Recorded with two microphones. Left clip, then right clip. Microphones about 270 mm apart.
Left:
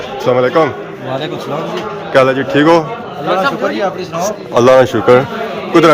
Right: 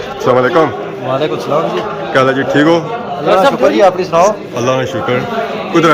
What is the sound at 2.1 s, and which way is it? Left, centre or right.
Speech, centre.